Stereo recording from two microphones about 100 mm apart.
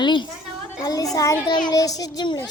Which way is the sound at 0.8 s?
40° left (ahead or behind).